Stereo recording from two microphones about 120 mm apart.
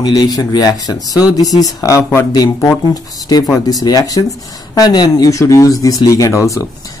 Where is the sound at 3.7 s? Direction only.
30° left (ahead or behind).